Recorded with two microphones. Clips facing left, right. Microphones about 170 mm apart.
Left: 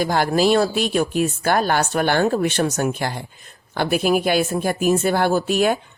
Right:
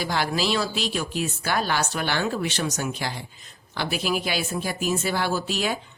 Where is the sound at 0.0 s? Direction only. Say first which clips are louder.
Left 7 dB; 50° left (ahead or behind).